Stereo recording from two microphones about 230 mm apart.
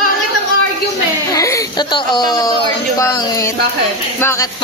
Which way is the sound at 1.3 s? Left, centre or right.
Centre.